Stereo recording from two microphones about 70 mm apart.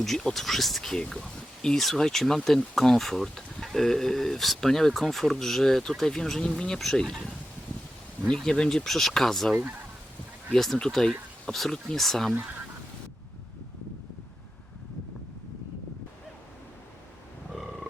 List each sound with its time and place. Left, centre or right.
0.0 s speech: centre
8.3 s speech: centre
12.3 s speech: right